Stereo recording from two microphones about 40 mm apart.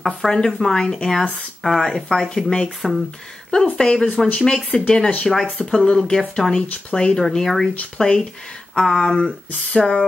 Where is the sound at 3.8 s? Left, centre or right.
Centre.